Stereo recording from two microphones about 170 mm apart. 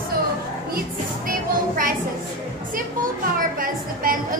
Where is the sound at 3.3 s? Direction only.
55° right (ahead or behind).